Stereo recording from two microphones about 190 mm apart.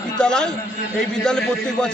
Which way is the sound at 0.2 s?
5° left (ahead or behind).